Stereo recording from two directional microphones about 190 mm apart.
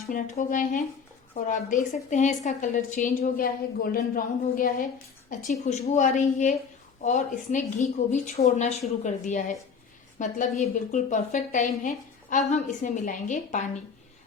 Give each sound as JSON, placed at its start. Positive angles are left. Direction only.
{"t": 0.1, "sound": "a woman's voice", "side_deg": 45}